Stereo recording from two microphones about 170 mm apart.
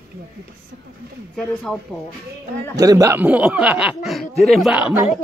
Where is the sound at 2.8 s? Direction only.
20° right (ahead or behind).